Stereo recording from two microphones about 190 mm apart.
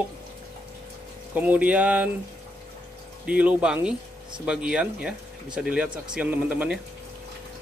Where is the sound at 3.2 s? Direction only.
5° right (ahead or behind).